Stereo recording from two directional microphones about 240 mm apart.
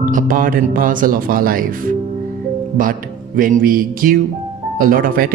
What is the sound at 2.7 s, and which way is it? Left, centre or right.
Speech, right.